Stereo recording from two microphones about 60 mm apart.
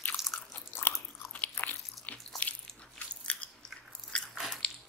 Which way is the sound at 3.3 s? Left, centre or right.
Left.